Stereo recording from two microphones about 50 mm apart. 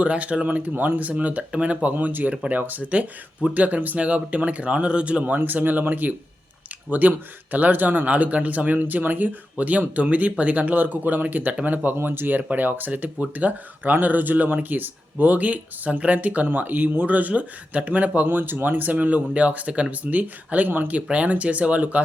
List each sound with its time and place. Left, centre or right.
0.0 s speech: right
5.2 s speech: right
11.9 s speech: right